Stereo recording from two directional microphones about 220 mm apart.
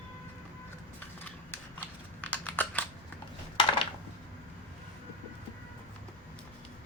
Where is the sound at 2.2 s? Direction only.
5° left (ahead or behind).